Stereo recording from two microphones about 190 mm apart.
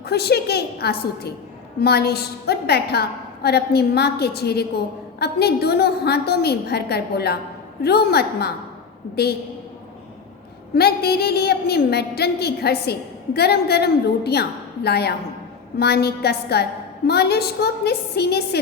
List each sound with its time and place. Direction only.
0.0 s a woman's voice: 60° left (ahead or behind)
10.8 s a woman's voice: 55° left (ahead or behind)